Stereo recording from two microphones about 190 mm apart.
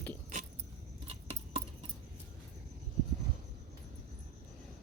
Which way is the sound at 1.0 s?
30° right (ahead or behind).